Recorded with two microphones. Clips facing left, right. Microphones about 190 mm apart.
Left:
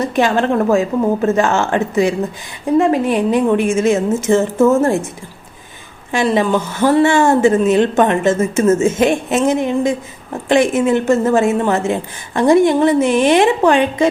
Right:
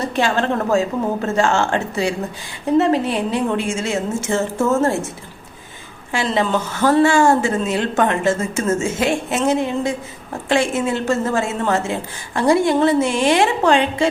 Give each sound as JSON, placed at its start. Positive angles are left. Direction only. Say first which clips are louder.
{"t": 0.0, "sound": "a woman's voice", "louder": "left 4 dB", "side_deg": 15}
{"t": 6.1, "sound": "a woman's voice", "louder": "left 5 dB", "side_deg": 15}